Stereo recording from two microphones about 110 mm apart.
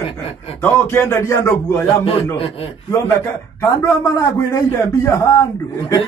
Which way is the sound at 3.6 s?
30° left (ahead or behind).